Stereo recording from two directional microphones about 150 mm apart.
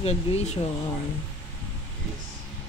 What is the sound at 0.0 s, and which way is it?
Speech, 45° left (ahead or behind).